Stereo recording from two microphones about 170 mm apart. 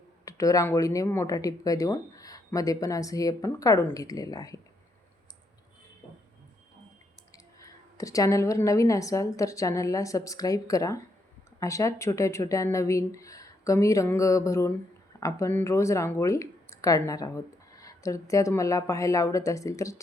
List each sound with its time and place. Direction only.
0.3 s speech: 20° left (ahead or behind)
7.6 s speech: 20° left (ahead or behind)